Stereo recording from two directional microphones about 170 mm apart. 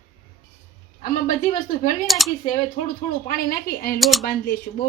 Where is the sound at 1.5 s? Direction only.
55° left (ahead or behind).